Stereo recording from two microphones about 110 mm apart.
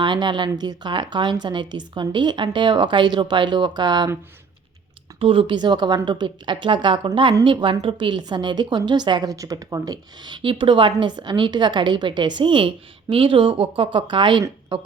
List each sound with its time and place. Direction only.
0.0 s a woman's voice: 45° right (ahead or behind)
5.2 s a woman's voice: 55° right (ahead or behind)